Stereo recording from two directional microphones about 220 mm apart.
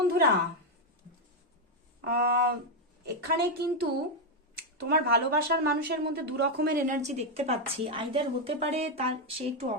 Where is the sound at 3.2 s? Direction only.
45° right (ahead or behind).